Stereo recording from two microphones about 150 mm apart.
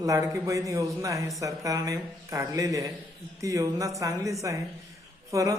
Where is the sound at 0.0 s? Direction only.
25° right (ahead or behind).